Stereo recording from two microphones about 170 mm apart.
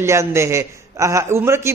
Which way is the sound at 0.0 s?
15° right (ahead or behind).